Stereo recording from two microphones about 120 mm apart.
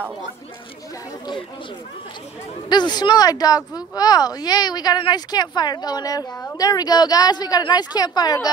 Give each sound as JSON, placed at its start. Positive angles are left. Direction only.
{"t": 2.7, "sound": "speech", "side_deg": 35}